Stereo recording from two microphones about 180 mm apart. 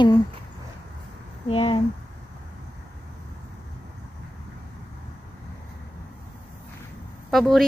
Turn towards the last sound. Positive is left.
turn(degrees=0)  # may be behind; listen again after turning